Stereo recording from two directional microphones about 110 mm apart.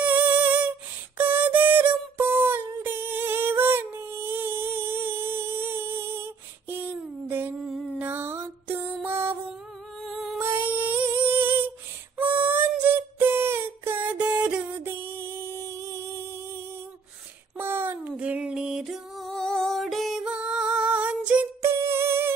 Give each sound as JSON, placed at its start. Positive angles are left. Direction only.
{"t": 0.0, "sound": "a sound", "side_deg": -15}
{"t": 1.1, "sound": "music", "side_deg": -15}
{"t": 7.2, "sound": "humming", "side_deg": -20}
{"t": 7.5, "sound": "a sound", "side_deg": 0}
{"t": 8.0, "sound": "music", "side_deg": -20}
{"t": 10.0, "sound": "music", "side_deg": 0}
{"t": 10.3, "sound": "humming", "side_deg": -20}
{"t": 12.2, "sound": "a sound", "side_deg": -15}
{"t": 17.6, "sound": "music", "side_deg": -20}
{"t": 21.5, "sound": "music", "side_deg": -25}